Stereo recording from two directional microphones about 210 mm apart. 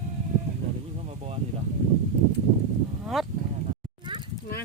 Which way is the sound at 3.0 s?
Centre (ahead or behind).